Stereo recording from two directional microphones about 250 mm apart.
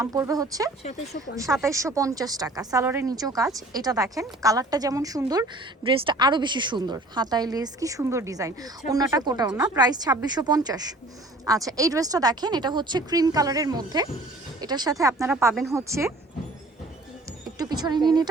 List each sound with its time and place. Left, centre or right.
0.0 s a woman's voice: centre
0.9 s speech: left
1.6 s a woman's voice: centre
17.6 s speech: centre